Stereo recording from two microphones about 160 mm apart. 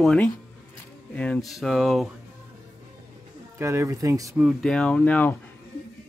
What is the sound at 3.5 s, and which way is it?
Speech, 20° right (ahead or behind).